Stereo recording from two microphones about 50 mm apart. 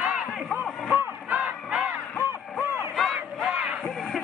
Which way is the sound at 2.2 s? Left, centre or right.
Right.